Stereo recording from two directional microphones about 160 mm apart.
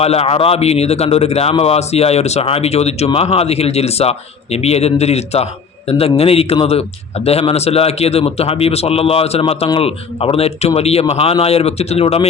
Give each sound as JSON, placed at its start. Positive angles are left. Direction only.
{"t": 0.0, "sound": "a man's voice", "side_deg": 40}